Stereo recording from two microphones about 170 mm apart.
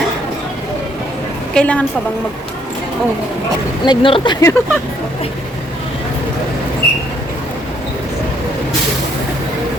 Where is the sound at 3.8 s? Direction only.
30° left (ahead or behind).